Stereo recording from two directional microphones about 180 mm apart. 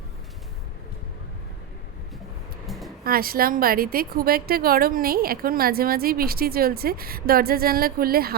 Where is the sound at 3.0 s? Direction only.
55° right (ahead or behind).